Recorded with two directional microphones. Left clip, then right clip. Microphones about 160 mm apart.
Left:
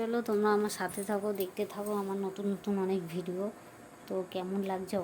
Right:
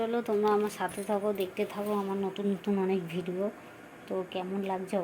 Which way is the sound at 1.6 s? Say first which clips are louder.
Right 3 dB; centre (ahead or behind).